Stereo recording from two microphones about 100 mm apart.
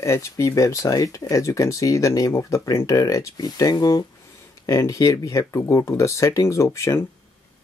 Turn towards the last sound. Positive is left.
turn(degrees=30)  # may be behind; listen again after turning